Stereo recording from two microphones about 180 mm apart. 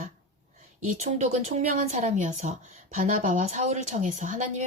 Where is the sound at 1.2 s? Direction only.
40° right (ahead or behind).